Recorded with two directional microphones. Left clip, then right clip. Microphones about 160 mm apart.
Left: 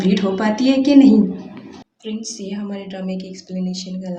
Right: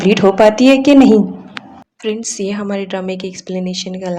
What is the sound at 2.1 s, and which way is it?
A woman's voice, 50° right (ahead or behind).